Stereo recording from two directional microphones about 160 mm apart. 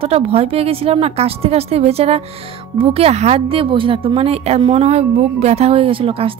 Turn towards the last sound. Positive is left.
turn(degrees=-35)  # may be behind; listen again after turning